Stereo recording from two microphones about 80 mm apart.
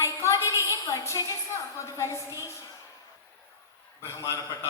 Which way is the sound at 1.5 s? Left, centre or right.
Left.